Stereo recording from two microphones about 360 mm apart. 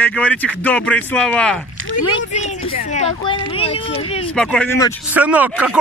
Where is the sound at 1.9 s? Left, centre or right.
Centre.